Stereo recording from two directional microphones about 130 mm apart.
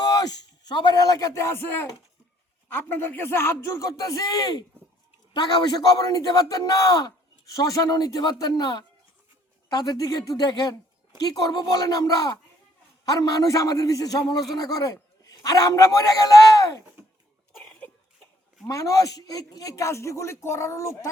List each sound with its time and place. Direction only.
0.0 s a sound: 30° left (ahead or behind)
0.7 s speech: 35° left (ahead or behind)
17.7 s cough: 10° left (ahead or behind)
18.7 s speech: 25° left (ahead or behind)